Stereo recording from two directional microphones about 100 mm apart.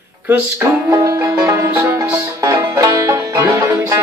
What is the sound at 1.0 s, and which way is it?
Music, 30° right (ahead or behind).